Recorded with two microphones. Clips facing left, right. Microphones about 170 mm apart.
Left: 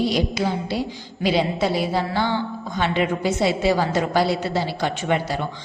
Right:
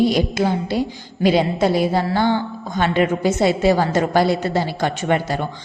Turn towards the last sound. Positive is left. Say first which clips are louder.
# right 3 dB
turn(degrees=-50)  # may be behind; listen again after turning